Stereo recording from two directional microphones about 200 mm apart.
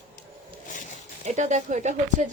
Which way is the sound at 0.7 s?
40° left (ahead or behind).